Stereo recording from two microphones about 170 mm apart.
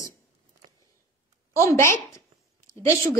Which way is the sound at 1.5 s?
15° left (ahead or behind).